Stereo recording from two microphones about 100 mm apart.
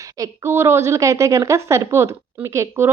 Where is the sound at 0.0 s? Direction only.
30° right (ahead or behind).